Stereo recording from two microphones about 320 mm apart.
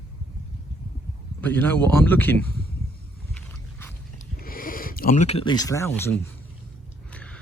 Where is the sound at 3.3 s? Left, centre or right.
Centre.